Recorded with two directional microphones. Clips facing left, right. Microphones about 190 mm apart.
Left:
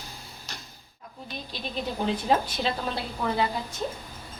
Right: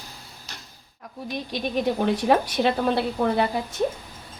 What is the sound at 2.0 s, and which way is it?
Speech, 70° right (ahead or behind).